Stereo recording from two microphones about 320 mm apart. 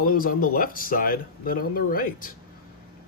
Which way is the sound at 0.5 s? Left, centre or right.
Left.